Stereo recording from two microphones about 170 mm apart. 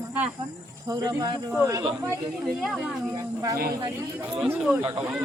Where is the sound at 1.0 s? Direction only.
20° right (ahead or behind).